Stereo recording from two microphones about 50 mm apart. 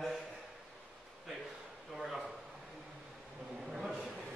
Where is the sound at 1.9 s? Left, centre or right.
Centre.